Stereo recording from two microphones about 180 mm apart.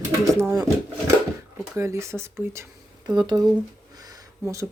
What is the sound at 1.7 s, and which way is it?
Speech, 15° right (ahead or behind).